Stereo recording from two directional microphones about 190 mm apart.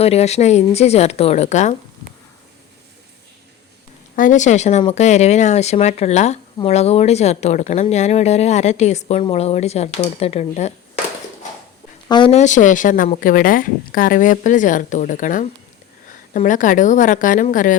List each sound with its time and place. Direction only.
0.0 s speech: 35° left (ahead or behind)
4.1 s speech: 45° left (ahead or behind)
12.0 s speech: 25° left (ahead or behind); by 17.7 s 45° left (ahead or behind)